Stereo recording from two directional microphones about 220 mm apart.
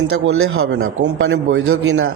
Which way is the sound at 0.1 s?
70° right (ahead or behind).